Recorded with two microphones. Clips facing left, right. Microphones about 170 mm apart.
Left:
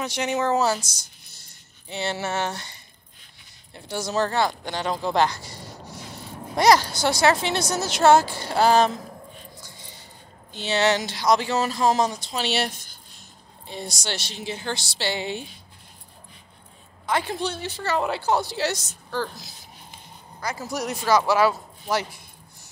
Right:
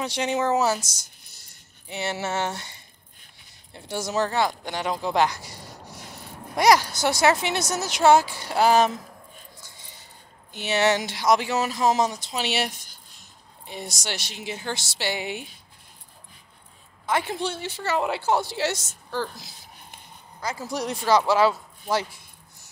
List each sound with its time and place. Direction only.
0.0 s speech: 30° right (ahead or behind)
0.3 s a woman's voice: 15° right (ahead or behind)
1.9 s a woman's voice: 15° right (ahead or behind)
3.7 s a woman's voice: 20° right (ahead or behind)
10.5 s a woman's voice: 20° right (ahead or behind)
17.1 s a woman's voice: 20° right (ahead or behind)
20.7 s a woman's voice: 30° right (ahead or behind)